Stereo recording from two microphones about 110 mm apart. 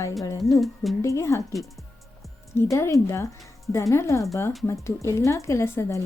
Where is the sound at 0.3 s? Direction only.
30° left (ahead or behind).